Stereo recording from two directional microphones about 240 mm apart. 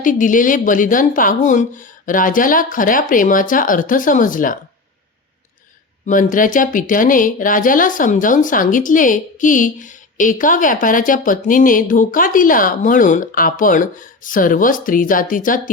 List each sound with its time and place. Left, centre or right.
0.0 s speech: left
6.1 s speech: left